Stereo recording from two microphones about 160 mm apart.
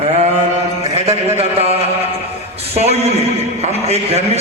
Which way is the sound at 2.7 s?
40° right (ahead or behind).